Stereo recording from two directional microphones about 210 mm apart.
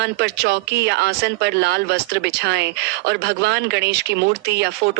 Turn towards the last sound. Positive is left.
turn(degrees=-55)  # may be behind; listen again after turning